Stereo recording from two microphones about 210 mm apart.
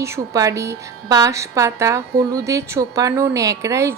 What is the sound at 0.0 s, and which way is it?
A woman's voice, 15° right (ahead or behind).